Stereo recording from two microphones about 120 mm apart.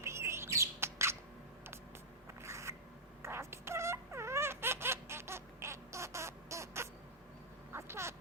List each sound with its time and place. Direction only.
0.0 s bird: 20° right (ahead or behind)
2.4 s a sound: 25° right (ahead or behind)
7.7 s vehicle: 20° right (ahead or behind)